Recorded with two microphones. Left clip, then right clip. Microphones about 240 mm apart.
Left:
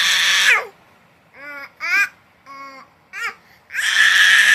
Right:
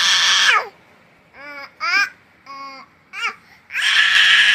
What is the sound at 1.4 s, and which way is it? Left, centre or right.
Babbling, left.